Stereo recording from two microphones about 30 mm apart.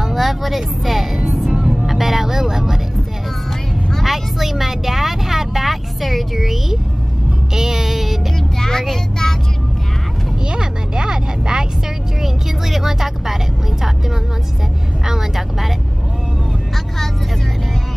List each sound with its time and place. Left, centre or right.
0.0 s speech: centre
1.5 s music: right
1.9 s vehicle: centre
4.0 s vehicle: centre
7.5 s music: centre
8.5 s vehicle: centre
10.5 s a sound: right
12.2 s vehicle: centre
15.0 s vehicle: centre